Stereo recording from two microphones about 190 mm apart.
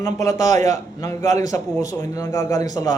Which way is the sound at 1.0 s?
20° left (ahead or behind).